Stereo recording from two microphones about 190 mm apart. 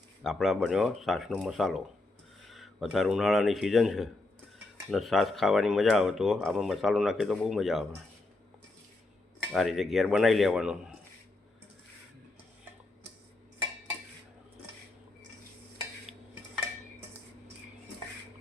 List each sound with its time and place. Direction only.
0.2 s speech: centre (ahead or behind)
9.4 s speech: centre (ahead or behind)